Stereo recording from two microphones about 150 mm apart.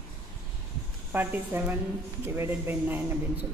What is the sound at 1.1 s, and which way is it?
Speech, 10° right (ahead or behind).